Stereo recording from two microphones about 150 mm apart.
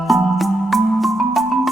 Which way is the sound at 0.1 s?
Centre (ahead or behind).